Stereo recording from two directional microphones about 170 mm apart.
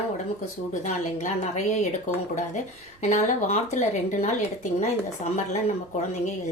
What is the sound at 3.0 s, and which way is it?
Speech, 45° left (ahead or behind).